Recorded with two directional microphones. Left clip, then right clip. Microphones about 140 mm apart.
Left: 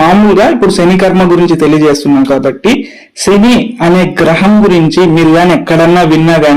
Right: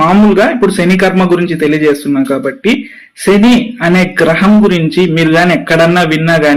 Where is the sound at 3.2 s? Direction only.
35° left (ahead or behind).